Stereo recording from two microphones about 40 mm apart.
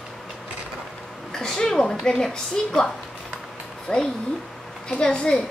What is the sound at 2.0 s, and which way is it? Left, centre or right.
A woman's voice, centre.